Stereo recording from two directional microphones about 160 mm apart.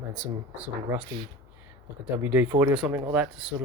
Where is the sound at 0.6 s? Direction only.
10° right (ahead or behind).